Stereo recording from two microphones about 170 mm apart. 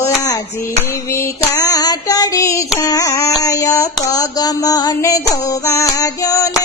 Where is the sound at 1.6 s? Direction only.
20° left (ahead or behind).